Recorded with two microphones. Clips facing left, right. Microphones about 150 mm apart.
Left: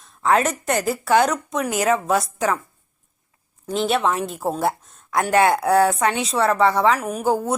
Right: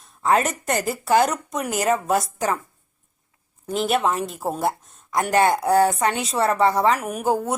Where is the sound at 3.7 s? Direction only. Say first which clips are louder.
Left 1 dB; 5° right (ahead or behind).